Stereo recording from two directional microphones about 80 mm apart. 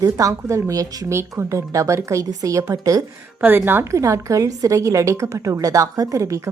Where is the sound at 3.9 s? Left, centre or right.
Right.